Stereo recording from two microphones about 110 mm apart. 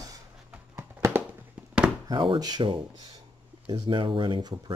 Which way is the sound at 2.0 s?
45° right (ahead or behind).